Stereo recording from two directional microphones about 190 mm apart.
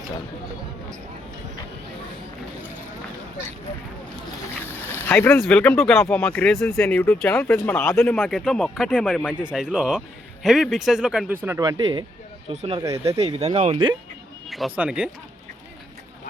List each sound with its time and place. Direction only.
4.6 s a sound: 10° left (ahead or behind)
5.5 s speech: 10° left (ahead or behind)
8.3 s speech: centre (ahead or behind)
9.0 s speech: 5° left (ahead or behind)
9.5 s speech: 5° right (ahead or behind)
11.4 s speech: 15° right (ahead or behind); by 13.9 s 30° right (ahead or behind)
14.5 s speech: 5° right (ahead or behind)